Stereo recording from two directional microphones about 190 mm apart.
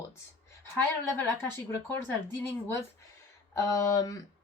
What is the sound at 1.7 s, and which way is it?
A woman's voice, 10° left (ahead or behind).